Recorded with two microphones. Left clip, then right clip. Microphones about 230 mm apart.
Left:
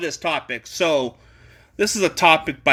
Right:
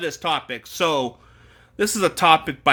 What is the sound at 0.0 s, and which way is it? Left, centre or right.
Speech, centre.